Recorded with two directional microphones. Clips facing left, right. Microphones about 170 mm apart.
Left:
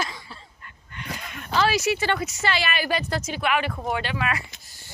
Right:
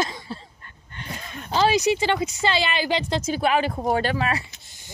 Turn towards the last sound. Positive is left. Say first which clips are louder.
# right 4 dB
turn(degrees=-35)  # may be behind; listen again after turning